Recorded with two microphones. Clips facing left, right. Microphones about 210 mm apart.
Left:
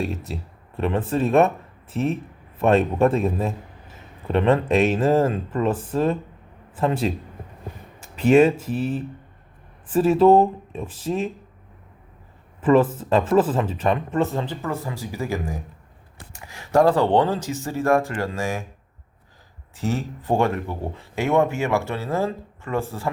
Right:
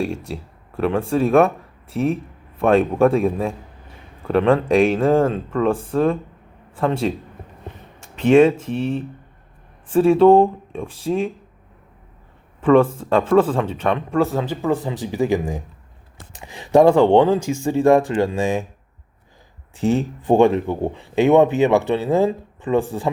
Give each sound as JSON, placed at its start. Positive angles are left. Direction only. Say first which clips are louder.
{"t": 0.0, "sound": "speech", "louder": "right 3 dB", "side_deg": 5}
{"t": 12.5, "sound": "speech", "louder": "right 3 dB", "side_deg": 5}
{"t": 19.8, "sound": "speech", "louder": "right 7 dB", "side_deg": -15}